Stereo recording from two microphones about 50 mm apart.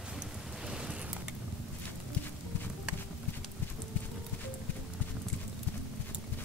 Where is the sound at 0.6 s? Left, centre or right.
Centre.